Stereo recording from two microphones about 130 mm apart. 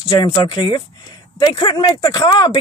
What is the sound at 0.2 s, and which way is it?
Speech, 30° left (ahead or behind).